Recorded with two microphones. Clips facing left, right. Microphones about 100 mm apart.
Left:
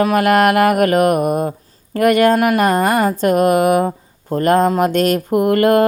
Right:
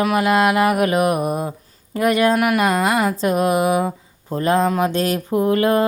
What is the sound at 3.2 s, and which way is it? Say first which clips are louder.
Speech: left 4 dB; 50° left (ahead or behind).